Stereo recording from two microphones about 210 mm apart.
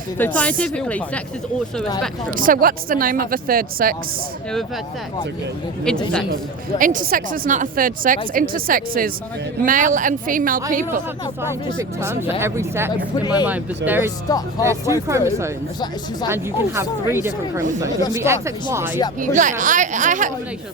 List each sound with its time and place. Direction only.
0.2 s speech: 5° left (ahead or behind)
2.3 s speech: 40° right (ahead or behind)
6.3 s speech: 40° right (ahead or behind)
11.4 s a woman's voice: 10° right (ahead or behind)
13.2 s speech: 20° left (ahead or behind)
13.5 s a woman's voice: 10° right (ahead or behind)
19.2 s speech: 35° right (ahead or behind)